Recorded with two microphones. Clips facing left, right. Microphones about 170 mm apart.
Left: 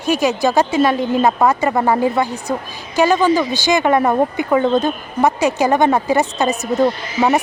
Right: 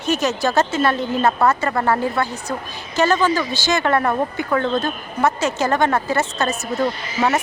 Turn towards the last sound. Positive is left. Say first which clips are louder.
# left 4 dB
turn(degrees=15)  # may be behind; listen again after turning